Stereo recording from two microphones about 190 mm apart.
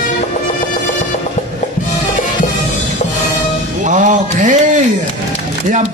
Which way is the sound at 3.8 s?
40° right (ahead or behind).